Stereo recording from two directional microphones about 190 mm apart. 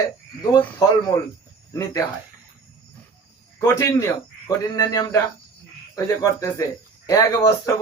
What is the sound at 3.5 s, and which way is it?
Speech, 15° left (ahead or behind).